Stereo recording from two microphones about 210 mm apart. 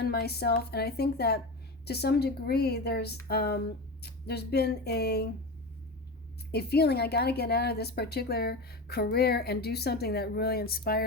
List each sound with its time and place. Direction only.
0.0 s a woman's voice: 50° left (ahead or behind)
6.5 s a woman's voice: 50° left (ahead or behind)